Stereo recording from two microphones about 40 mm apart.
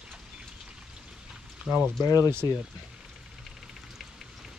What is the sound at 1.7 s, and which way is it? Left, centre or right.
Speech, right.